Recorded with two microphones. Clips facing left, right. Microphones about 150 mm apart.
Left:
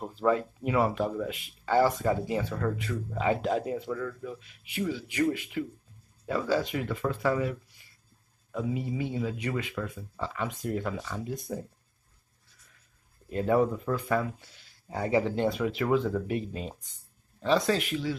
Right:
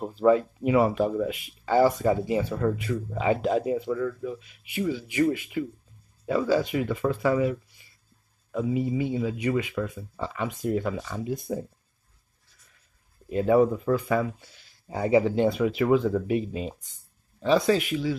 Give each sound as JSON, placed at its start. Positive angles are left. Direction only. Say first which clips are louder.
{"t": 0.0, "sound": "speech", "louder": "right 6 dB", "side_deg": -15}
{"t": 13.3, "sound": "speech", "louder": "right 5 dB", "side_deg": -10}